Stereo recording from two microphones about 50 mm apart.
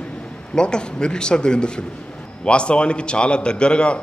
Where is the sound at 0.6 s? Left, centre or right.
Centre.